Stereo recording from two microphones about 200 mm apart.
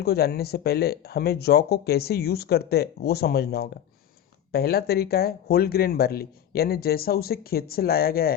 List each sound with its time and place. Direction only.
0.0 s speech: 50° left (ahead or behind)